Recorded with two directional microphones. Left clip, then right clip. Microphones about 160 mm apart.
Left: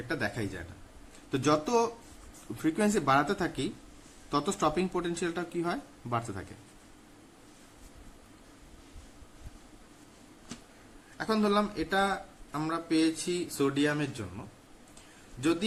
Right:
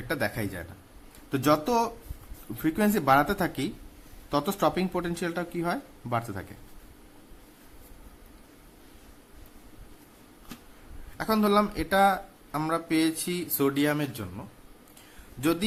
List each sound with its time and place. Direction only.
0.1 s speech: 35° right (ahead or behind)
11.2 s speech: 40° right (ahead or behind)